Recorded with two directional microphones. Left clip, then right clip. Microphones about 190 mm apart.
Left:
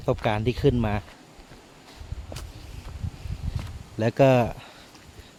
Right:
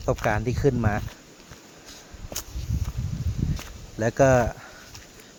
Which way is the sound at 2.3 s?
65° right (ahead or behind).